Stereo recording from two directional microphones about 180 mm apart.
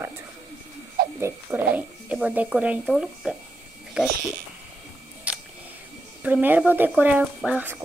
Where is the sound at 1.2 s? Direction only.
10° right (ahead or behind).